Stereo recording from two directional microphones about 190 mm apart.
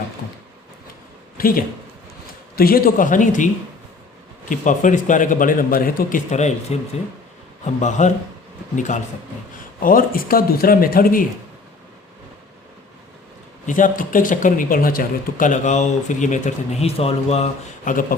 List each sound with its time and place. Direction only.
1.4 s a man's voice: 50° left (ahead or behind)
13.7 s speech: 45° left (ahead or behind)